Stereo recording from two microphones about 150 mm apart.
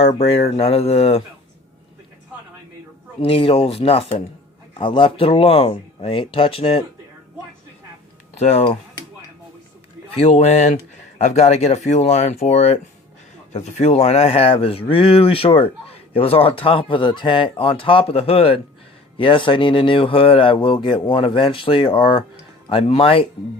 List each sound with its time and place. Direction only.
0.0 s speech: 40° left (ahead or behind)
3.2 s speech: 40° left (ahead or behind)
8.4 s speech: 45° left (ahead or behind)
10.2 s speech: 45° left (ahead or behind)